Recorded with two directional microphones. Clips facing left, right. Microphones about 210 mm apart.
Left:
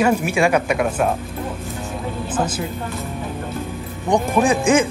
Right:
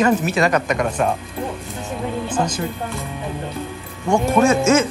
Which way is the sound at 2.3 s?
5° left (ahead or behind).